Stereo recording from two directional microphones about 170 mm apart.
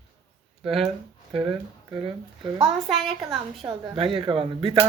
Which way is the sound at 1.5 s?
30° right (ahead or behind).